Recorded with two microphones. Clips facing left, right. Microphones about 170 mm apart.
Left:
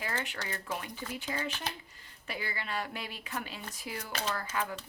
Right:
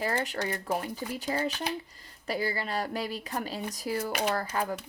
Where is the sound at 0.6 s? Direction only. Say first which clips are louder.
Right 7 dB; 35° right (ahead or behind).